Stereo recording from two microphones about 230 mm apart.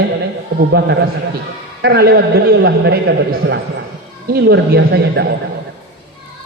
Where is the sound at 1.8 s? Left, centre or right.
Right.